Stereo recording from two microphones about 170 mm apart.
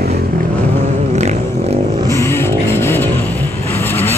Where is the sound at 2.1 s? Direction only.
15° left (ahead or behind).